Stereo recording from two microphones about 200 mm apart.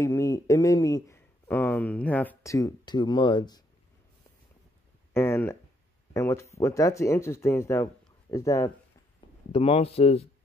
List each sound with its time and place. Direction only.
0.0 s speech: 15° left (ahead or behind)
5.1 s speech: 10° left (ahead or behind)
9.5 s speech: 30° left (ahead or behind)